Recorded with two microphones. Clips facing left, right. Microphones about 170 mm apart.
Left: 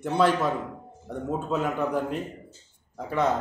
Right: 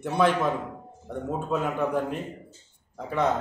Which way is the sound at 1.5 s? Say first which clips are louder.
Right 1 dB; 15° right (ahead or behind).